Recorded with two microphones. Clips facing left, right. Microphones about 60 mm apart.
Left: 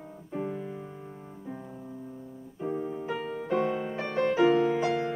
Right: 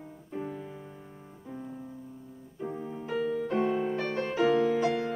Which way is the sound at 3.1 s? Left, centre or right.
Centre.